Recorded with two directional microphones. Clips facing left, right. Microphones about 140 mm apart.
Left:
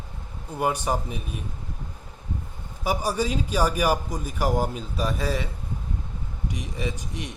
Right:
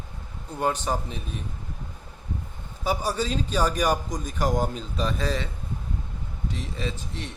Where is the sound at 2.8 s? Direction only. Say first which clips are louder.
Left 1 dB; 10° left (ahead or behind).